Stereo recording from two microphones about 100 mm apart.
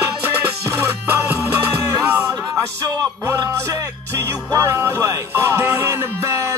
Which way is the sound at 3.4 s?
30° right (ahead or behind).